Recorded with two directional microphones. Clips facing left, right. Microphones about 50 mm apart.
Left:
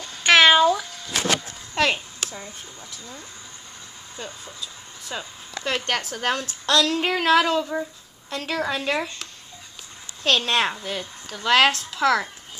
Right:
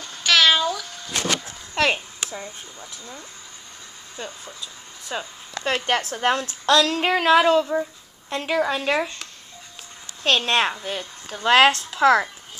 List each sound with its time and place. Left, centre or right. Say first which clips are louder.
0.2 s meow: left 4 dB; left
1.8 s speech: right 1 dB; centre
5.0 s speech: right 3 dB; centre
8.3 s speech: right 4 dB; centre
11.2 s speech: right 3 dB; right